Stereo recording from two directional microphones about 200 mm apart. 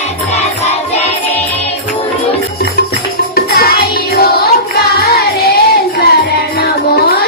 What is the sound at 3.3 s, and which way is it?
Music, 50° left (ahead or behind).